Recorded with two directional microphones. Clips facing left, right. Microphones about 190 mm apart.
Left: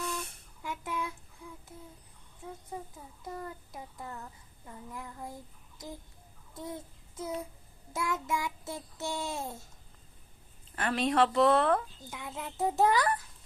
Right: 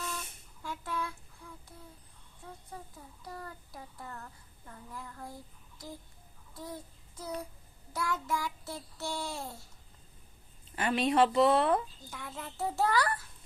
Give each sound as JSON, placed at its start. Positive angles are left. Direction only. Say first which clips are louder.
{"t": 0.6, "sound": "a sound", "louder": "left 1 dB", "side_deg": 20}
{"t": 2.4, "sound": "child singing", "louder": "left 5 dB", "side_deg": 20}
{"t": 6.5, "sound": "a child's voice", "louder": "left 3 dB", "side_deg": 20}
{"t": 7.2, "sound": "child singing", "louder": "left 3 dB", "side_deg": 20}
{"t": 10.8, "sound": "speech", "louder": "right 1 dB", "side_deg": -5}
{"t": 12.1, "sound": "child singing", "louder": "left 3 dB", "side_deg": 15}